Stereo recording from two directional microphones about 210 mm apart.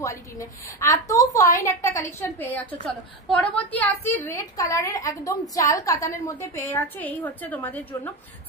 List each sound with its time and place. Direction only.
0.0 s a woman's voice: 15° left (ahead or behind)